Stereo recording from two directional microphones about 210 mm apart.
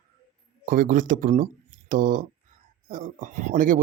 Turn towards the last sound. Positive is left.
turn(degrees=-40)  # may be behind; listen again after turning